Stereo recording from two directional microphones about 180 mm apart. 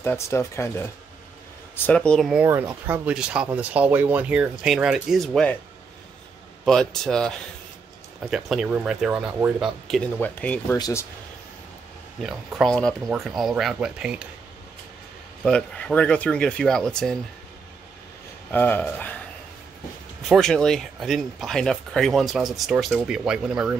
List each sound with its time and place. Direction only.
0.0 s speech: 15° left (ahead or behind)
1.9 s speech: 5° left (ahead or behind)
2.6 s speech: 15° right (ahead or behind); by 5.6 s 5° left (ahead or behind)
6.6 s speech: 5° left (ahead or behind)
12.2 s speech: centre (ahead or behind)
15.4 s speech: 5° left (ahead or behind)
18.5 s speech: 10° left (ahead or behind)
20.2 s speech: centre (ahead or behind)